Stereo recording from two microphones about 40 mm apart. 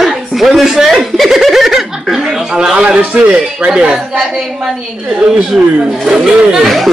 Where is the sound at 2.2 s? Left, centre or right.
Centre.